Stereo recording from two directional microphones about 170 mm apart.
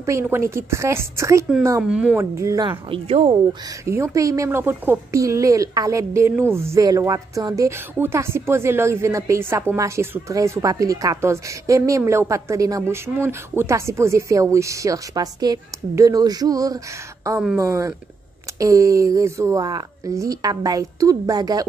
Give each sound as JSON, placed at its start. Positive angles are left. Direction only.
{"t": 0.0, "sound": "a woman's voice", "side_deg": -15}
{"t": 1.8, "sound": "a woman's voice", "side_deg": -5}
{"t": 2.3, "sound": "speech", "side_deg": -20}
{"t": 3.8, "sound": "a woman's voice", "side_deg": -15}